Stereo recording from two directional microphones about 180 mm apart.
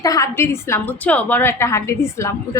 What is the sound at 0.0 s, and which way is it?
A woman's voice, 20° left (ahead or behind).